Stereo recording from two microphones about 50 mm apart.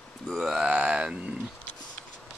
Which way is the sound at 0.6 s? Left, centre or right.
Right.